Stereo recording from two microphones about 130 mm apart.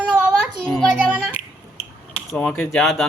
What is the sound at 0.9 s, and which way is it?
Music, 10° right (ahead or behind).